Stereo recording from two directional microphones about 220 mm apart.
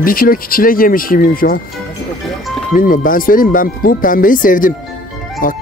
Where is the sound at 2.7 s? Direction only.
40° left (ahead or behind).